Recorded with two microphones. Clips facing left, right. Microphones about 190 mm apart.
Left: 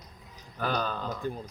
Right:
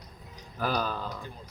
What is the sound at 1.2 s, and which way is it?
Speech, 50° left (ahead or behind).